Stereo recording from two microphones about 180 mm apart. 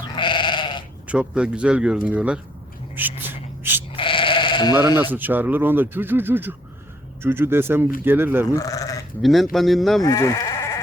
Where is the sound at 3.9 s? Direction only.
30° left (ahead or behind).